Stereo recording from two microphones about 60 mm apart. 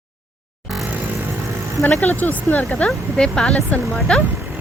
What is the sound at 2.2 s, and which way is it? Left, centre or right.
Speech, left.